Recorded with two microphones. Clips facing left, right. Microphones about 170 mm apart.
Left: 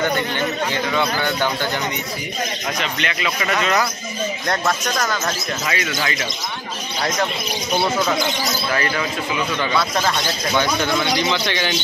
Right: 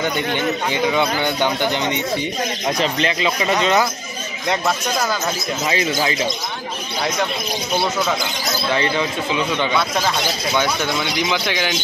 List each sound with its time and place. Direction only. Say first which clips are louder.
0.7 s speech: right 3 dB; 15° right (ahead or behind)
2.8 s a man's voice: right 6 dB; 30° right (ahead or behind)
4.5 s speech: right 3 dB; 10° right (ahead or behind)
5.7 s a man's voice: right 5 dB; 25° right (ahead or behind)
8.7 s a man's voice: right 4 dB; 25° right (ahead or behind)
9.8 s speech: even; 5° right (ahead or behind)